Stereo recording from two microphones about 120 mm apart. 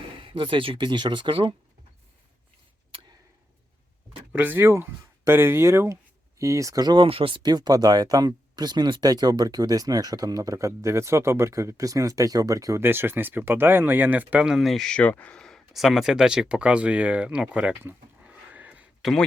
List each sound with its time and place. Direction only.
0.2 s speech: 45° right (ahead or behind)
4.3 s speech: 15° right (ahead or behind)